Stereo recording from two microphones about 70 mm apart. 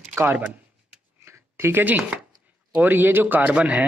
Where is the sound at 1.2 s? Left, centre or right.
Right.